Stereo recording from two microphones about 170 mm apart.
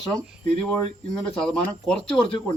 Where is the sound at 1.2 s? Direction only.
5° left (ahead or behind).